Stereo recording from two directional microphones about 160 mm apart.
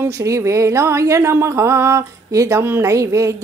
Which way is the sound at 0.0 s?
15° right (ahead or behind).